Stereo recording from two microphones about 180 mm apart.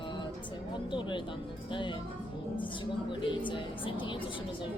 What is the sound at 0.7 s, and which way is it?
A woman's voice, 25° left (ahead or behind).